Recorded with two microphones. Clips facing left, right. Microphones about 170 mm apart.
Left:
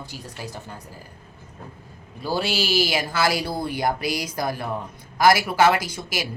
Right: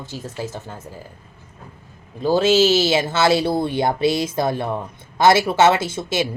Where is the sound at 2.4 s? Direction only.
20° right (ahead or behind).